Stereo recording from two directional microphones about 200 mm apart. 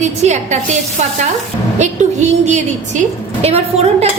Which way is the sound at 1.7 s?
35° right (ahead or behind).